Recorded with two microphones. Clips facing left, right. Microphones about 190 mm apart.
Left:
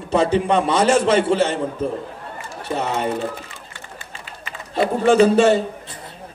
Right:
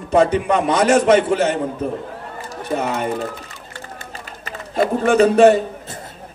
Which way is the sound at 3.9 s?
40° right (ahead or behind).